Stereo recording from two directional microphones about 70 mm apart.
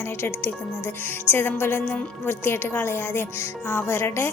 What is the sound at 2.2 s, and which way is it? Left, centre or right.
A woman's voice, left.